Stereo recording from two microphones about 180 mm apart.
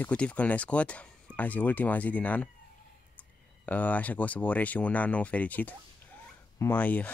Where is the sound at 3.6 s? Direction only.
10° left (ahead or behind).